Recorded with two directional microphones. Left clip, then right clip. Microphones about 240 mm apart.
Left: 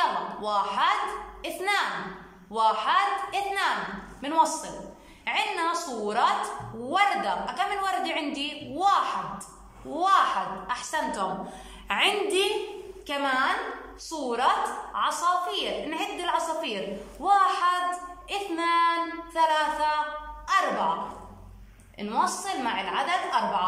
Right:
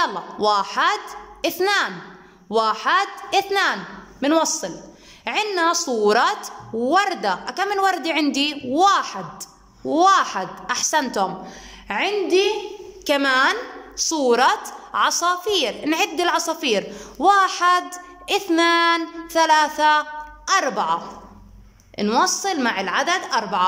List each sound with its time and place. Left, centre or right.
0.0 s a sound: right
1.4 s a woman's voice: right
11.9 s a woman's voice: right
13.0 s a woman's voice: right
21.9 s a woman's voice: right